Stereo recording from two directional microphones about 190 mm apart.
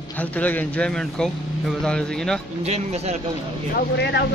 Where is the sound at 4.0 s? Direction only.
60° left (ahead or behind).